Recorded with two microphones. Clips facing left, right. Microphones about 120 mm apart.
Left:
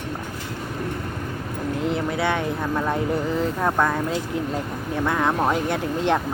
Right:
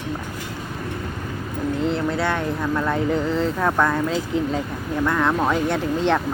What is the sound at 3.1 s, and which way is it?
Speech, 10° left (ahead or behind).